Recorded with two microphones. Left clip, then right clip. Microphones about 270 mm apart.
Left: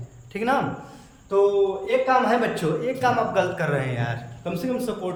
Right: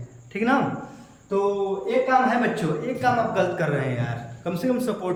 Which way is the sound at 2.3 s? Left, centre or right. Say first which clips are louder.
Left 1 dB; centre.